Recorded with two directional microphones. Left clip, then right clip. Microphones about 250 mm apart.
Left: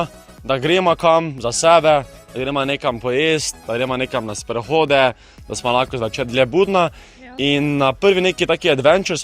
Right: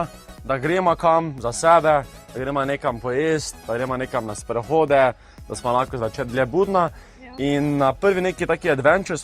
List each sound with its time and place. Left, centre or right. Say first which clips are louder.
0.0 s speech: left 4 dB; left